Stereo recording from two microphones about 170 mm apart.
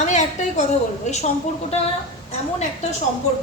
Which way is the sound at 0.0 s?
45° left (ahead or behind).